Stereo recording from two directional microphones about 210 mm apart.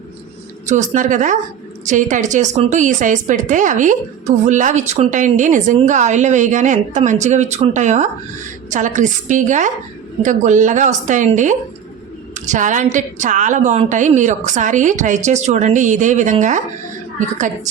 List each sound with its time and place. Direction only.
0.7 s a woman's voice: 35° right (ahead or behind)